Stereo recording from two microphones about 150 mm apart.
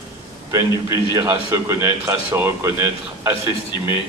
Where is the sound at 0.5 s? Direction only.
20° right (ahead or behind).